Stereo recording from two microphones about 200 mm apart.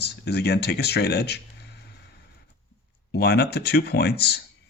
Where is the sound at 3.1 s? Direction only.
55° left (ahead or behind).